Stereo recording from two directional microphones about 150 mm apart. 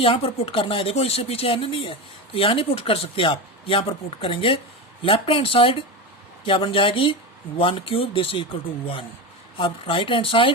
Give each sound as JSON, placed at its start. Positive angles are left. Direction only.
{"t": 0.0, "sound": "speech", "side_deg": 40}
{"t": 9.6, "sound": "speech", "side_deg": 35}